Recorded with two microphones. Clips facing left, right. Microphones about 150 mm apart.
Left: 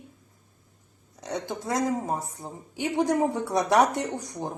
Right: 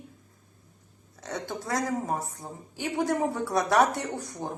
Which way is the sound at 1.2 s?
20° left (ahead or behind).